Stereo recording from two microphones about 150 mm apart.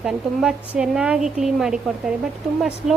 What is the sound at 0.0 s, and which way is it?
A woman's voice, 5° right (ahead or behind).